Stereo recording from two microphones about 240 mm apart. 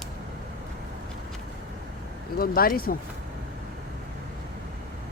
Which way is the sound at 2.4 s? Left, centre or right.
Left.